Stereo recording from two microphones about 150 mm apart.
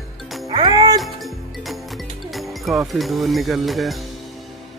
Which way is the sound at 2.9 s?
Centre (ahead or behind).